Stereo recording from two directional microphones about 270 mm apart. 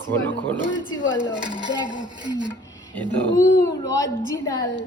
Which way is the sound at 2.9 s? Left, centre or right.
Centre.